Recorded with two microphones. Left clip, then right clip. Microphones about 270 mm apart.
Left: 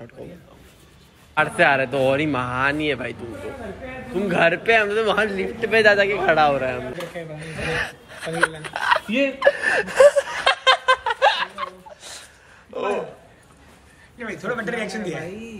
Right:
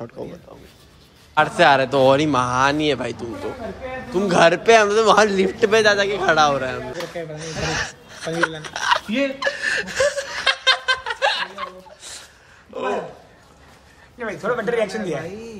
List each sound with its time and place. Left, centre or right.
0.2 s speech: centre
5.8 s speech: centre
8.6 s chuckle: centre
12.7 s a sound: centre
14.1 s a sound: centre
14.6 s speech: right